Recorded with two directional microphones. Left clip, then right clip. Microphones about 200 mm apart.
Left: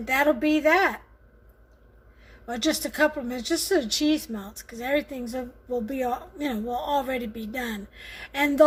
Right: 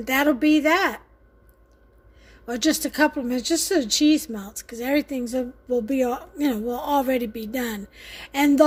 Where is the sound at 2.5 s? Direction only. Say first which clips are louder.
Right 3 dB; 45° right (ahead or behind).